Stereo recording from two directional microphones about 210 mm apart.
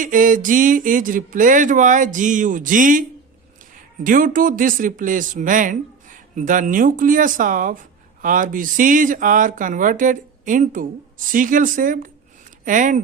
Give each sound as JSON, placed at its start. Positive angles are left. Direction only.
{"t": 0.0, "sound": "speech", "side_deg": -40}
{"t": 4.0, "sound": "speech", "side_deg": -40}